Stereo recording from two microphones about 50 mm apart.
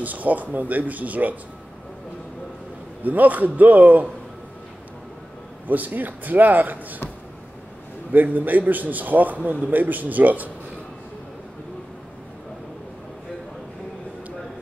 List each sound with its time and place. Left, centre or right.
0.0 s speech: right
3.0 s speech: right
5.7 s speech: right
8.1 s speech: right